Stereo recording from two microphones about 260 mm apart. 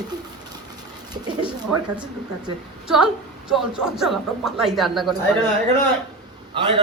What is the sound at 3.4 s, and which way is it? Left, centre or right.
Speech, centre.